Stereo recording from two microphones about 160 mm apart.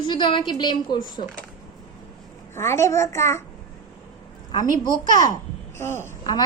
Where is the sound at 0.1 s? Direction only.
30° left (ahead or behind).